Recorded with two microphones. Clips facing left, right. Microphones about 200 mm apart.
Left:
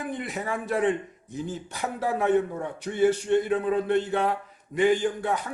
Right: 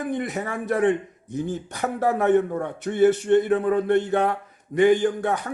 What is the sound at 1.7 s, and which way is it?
A man's voice, 50° right (ahead or behind).